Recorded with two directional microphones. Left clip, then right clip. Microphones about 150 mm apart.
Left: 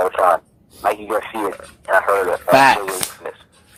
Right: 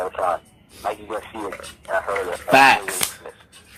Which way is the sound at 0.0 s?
35° left (ahead or behind).